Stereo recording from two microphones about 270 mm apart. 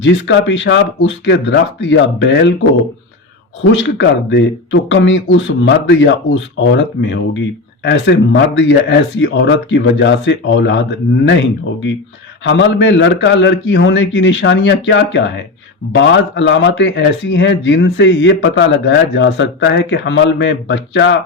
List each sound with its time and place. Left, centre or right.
0.0 s a man's voice: left
3.7 s a man's voice: left